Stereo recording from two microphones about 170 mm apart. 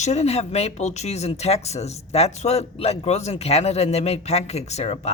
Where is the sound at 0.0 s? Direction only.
40° left (ahead or behind).